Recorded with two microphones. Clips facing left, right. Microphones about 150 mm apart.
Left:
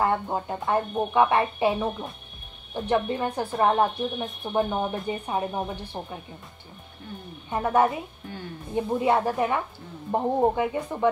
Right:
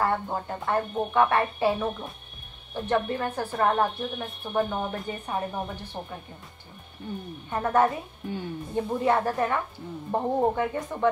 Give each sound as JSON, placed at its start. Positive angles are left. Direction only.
{"t": 0.0, "sound": "speech", "side_deg": 15}
{"t": 7.4, "sound": "speech", "side_deg": 15}